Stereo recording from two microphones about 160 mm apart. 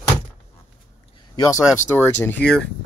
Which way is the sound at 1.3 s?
20° left (ahead or behind).